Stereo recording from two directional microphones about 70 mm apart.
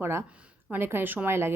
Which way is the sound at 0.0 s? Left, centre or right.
Right.